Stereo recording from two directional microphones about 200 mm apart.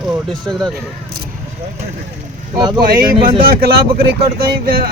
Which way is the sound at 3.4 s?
50° right (ahead or behind).